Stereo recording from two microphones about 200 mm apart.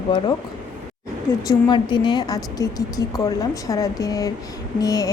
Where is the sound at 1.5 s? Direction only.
20° left (ahead or behind).